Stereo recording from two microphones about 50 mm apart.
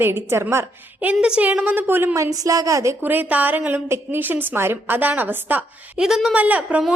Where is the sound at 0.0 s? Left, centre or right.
Right.